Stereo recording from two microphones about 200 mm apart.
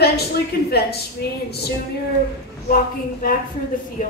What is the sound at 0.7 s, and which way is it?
Speech, 55° left (ahead or behind).